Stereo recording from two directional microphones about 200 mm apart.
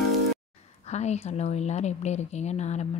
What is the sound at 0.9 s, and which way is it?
A woman's voice, 35° left (ahead or behind).